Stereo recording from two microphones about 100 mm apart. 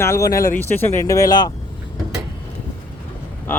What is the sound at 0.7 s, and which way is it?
Speech, 20° left (ahead or behind).